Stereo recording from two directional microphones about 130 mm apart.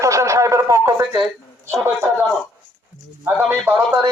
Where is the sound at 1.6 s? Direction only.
20° right (ahead or behind).